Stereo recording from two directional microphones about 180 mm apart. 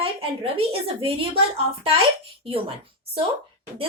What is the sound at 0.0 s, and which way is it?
A woman's voice, 30° right (ahead or behind).